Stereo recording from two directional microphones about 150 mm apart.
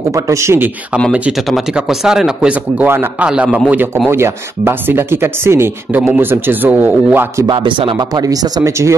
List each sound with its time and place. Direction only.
0.1 s speech: 20° right (ahead or behind)
1.1 s speech: 5° right (ahead or behind)
7.4 s speech: 35° right (ahead or behind)